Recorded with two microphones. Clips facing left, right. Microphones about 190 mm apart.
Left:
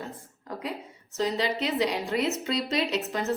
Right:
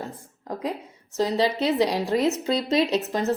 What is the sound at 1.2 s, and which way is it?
Speech, 35° right (ahead or behind).